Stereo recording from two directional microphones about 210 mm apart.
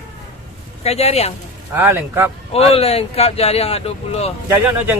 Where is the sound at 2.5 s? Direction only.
30° left (ahead or behind).